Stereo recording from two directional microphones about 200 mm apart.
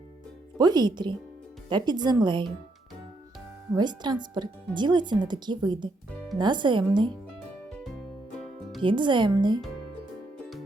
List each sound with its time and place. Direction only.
0.6 s speech: 20° right (ahead or behind)
3.7 s speech: 20° right (ahead or behind)
8.8 s speech: 25° right (ahead or behind)